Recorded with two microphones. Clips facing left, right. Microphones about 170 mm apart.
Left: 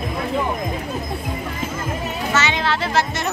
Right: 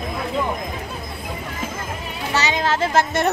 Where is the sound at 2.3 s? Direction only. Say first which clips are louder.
Right 1 dB; 40° right (ahead or behind).